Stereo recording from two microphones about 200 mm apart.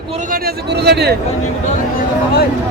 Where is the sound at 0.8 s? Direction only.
55° right (ahead or behind).